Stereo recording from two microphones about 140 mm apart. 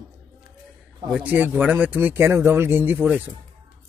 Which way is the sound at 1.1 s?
10° right (ahead or behind).